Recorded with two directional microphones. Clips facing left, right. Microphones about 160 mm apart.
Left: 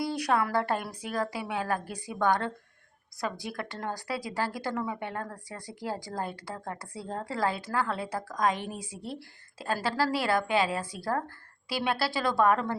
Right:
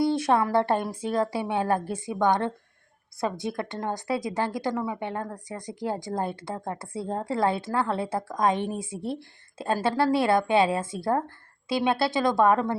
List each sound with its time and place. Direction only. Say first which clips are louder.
0.0 s a woman's voice: right 5 dB; 25° right (ahead or behind)